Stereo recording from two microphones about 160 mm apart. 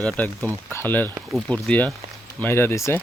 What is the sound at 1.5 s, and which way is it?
Speech, 10° left (ahead or behind).